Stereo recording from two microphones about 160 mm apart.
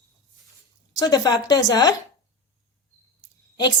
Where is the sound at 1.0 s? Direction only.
25° left (ahead or behind).